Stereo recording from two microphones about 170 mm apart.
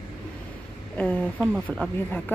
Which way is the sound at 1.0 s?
10° left (ahead or behind).